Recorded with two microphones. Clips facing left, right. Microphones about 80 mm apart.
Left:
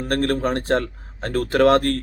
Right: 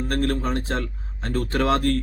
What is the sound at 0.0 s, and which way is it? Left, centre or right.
Speech, left.